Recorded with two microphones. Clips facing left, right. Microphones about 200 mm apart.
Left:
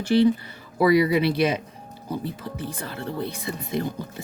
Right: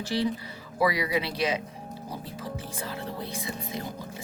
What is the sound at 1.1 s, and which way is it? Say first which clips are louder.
Speech: left 6 dB; 60° left (ahead or behind).